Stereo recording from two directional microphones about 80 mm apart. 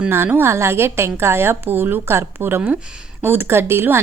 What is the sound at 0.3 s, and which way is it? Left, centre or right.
A woman's voice, right.